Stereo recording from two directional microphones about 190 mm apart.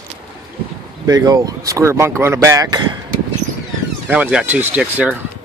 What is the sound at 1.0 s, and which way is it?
Speech, 20° right (ahead or behind).